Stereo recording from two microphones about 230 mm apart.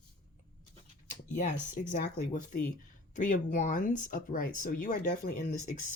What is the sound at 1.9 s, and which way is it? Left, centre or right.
Speech, left.